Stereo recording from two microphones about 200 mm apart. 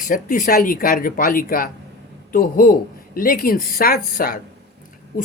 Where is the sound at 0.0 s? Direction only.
40° left (ahead or behind).